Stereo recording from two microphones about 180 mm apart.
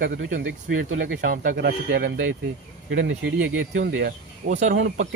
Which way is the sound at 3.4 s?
90° right.